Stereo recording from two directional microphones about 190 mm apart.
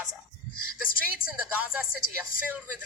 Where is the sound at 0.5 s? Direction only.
50° left (ahead or behind).